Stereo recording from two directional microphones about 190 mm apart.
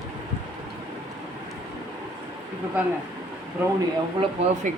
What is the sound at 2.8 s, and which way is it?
Speech, 10° right (ahead or behind).